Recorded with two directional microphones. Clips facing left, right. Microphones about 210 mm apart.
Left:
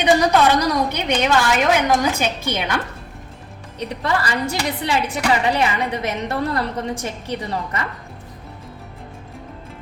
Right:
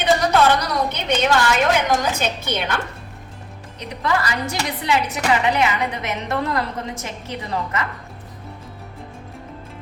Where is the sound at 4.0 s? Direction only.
30° left (ahead or behind).